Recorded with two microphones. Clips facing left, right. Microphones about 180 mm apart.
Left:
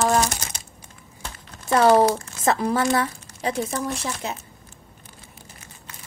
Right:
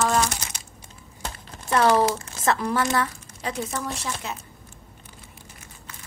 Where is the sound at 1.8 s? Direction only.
30° left (ahead or behind).